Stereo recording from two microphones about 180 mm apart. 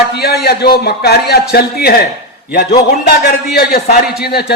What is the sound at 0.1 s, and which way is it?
A man's voice, 60° left (ahead or behind).